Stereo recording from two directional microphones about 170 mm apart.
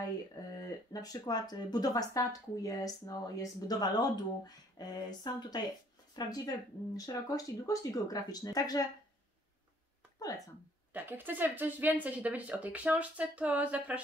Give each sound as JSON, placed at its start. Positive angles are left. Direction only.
{"t": 0.7, "sound": "speech", "side_deg": 20}
{"t": 10.9, "sound": "speech", "side_deg": -10}